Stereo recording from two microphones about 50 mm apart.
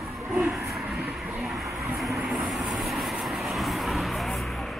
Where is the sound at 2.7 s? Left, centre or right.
Centre.